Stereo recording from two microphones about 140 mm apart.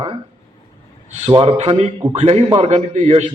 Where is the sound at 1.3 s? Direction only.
40° right (ahead or behind).